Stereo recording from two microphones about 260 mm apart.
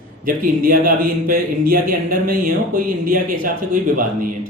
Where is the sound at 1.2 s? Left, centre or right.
Right.